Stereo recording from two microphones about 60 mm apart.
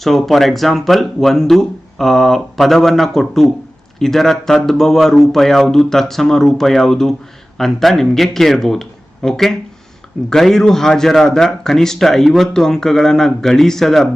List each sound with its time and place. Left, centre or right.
0.0 s a man's voice: centre